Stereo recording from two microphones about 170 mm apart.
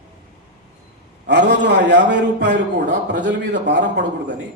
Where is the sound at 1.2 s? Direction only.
90° right.